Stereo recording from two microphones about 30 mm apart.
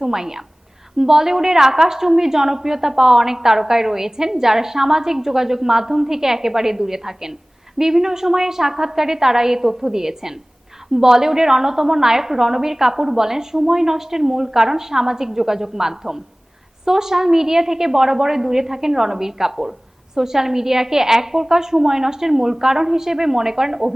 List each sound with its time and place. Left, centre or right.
0.0 s a woman's voice: centre